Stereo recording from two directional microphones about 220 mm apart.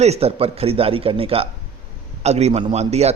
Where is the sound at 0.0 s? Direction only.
30° right (ahead or behind).